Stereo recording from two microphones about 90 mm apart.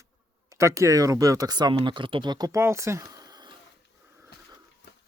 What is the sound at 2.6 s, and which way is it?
Speech, 30° right (ahead or behind).